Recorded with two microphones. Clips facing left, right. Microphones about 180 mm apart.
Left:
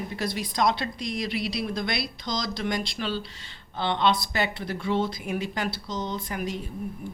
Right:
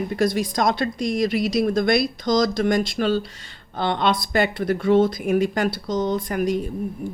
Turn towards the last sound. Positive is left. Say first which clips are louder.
# right 9 dB
turn(degrees=-45)  # may be behind; listen again after turning